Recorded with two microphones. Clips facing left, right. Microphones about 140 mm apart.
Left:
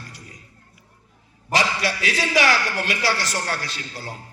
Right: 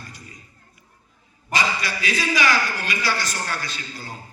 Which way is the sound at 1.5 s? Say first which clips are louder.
Left 2 dB; 75° left (ahead or behind).